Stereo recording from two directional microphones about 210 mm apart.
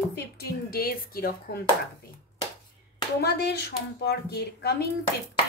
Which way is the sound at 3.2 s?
50° left (ahead or behind).